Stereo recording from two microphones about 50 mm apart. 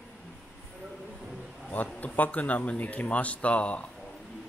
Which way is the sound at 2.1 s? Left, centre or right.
Left.